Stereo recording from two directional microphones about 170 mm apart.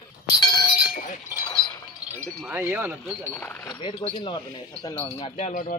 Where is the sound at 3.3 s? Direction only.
10° left (ahead or behind).